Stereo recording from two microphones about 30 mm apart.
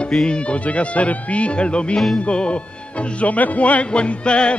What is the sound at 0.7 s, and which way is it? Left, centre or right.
Music, left.